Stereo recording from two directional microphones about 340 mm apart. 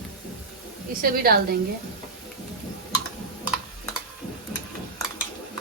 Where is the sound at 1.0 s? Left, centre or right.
Right.